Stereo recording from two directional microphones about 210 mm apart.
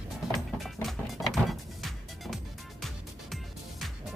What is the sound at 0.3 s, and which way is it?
Music, centre (ahead or behind).